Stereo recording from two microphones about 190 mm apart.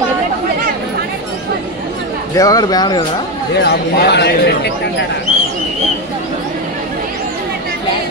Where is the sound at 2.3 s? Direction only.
20° left (ahead or behind).